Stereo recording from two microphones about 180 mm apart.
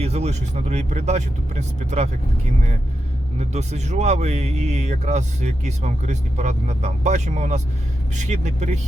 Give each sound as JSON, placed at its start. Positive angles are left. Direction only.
{"t": 0.0, "sound": "a man's voice", "side_deg": -35}
{"t": 3.3, "sound": "a man's voice", "side_deg": -40}